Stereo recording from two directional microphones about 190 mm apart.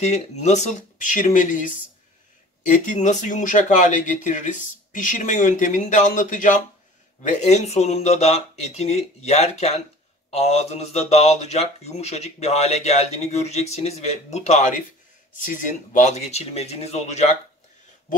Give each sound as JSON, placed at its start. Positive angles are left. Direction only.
{"t": 0.0, "sound": "speech", "side_deg": 35}
{"t": 2.6, "sound": "speech", "side_deg": 40}